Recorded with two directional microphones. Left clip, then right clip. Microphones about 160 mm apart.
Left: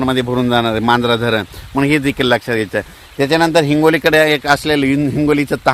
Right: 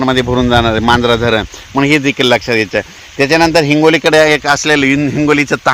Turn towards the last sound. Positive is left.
turn(degrees=-25)  # may be behind; listen again after turning